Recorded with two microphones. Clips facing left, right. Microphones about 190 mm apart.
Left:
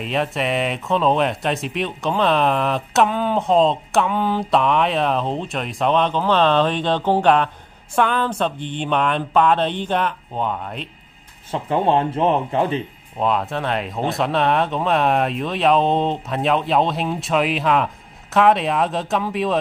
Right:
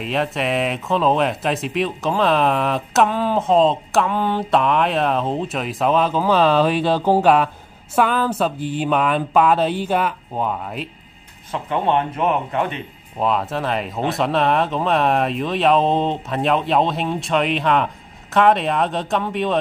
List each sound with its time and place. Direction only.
0.0 s speech: centre (ahead or behind)
11.5 s speech: 30° left (ahead or behind)
13.2 s speech: centre (ahead or behind)